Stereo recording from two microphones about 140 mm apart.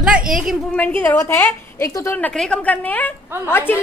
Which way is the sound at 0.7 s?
10° left (ahead or behind).